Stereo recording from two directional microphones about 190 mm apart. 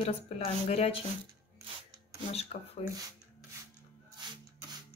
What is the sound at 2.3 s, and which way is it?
Speech, 35° left (ahead or behind).